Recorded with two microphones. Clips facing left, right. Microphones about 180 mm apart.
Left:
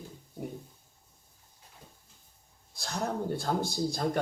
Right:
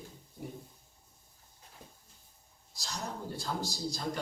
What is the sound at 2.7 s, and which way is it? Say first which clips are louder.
A man's voice: left 7 dB; 55° left (ahead or behind).